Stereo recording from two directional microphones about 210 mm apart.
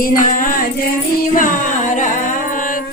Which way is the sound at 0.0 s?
40° left (ahead or behind).